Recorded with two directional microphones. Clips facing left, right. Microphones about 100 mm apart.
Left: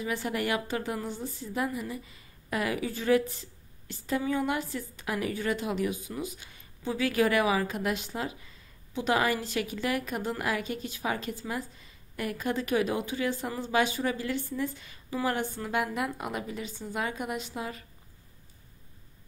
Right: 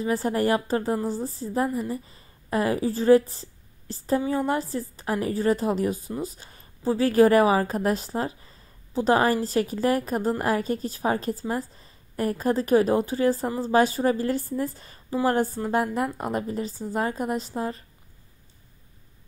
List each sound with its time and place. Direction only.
0.0 s a woman's voice: 35° right (ahead or behind)